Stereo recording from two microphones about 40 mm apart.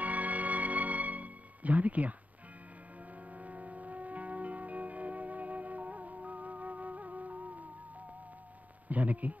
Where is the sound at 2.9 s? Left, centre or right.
Right.